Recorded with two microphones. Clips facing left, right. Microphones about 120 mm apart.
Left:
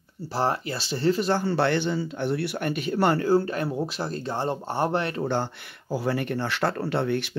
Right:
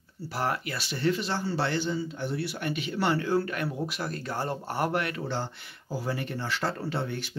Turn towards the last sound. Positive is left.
turn(degrees=65)  # may be behind; listen again after turning